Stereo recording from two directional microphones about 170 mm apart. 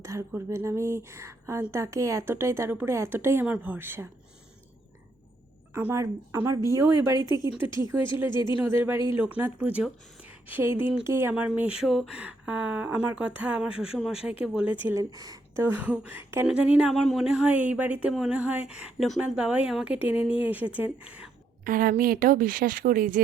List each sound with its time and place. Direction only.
0.0 s speech: 15° right (ahead or behind)
5.7 s speech: 15° right (ahead or behind)
8.7 s speech: 15° right (ahead or behind)
14.8 s speech: 20° right (ahead or behind)
21.6 s speech: 55° right (ahead or behind)